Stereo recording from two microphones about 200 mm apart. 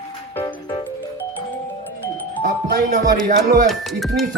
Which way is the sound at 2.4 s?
45° right (ahead or behind).